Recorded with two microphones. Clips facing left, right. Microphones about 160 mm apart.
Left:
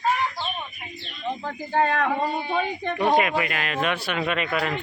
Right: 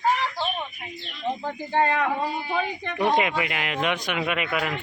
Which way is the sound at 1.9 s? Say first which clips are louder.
Left 1 dB; 10° right (ahead or behind).